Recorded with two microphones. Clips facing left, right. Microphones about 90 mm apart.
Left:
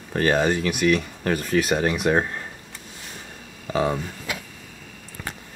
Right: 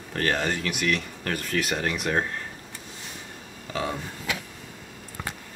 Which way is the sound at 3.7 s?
30° left (ahead or behind).